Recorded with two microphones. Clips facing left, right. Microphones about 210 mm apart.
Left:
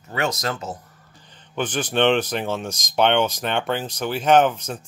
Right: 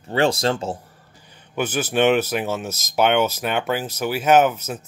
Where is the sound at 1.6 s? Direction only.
5° right (ahead or behind).